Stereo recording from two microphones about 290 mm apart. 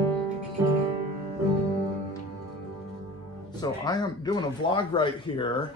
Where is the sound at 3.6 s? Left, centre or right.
Centre.